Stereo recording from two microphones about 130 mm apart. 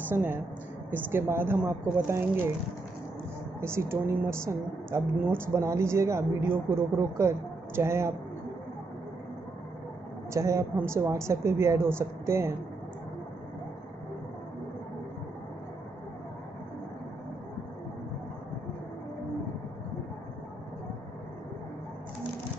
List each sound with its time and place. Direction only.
0.1 s speech: 15° right (ahead or behind)
3.6 s a woman's voice: 20° right (ahead or behind)
10.3 s a woman's voice: 25° right (ahead or behind)